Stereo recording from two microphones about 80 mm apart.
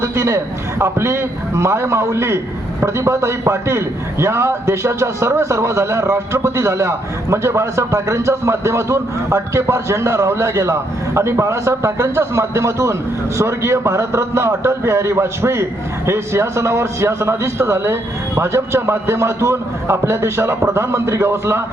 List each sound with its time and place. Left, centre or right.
0.0 s a man's voice: right